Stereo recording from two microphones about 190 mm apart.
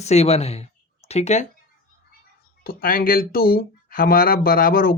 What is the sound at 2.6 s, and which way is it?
Speech, 50° left (ahead or behind).